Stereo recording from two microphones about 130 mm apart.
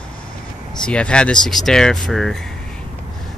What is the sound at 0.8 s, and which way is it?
Speech, 10° left (ahead or behind).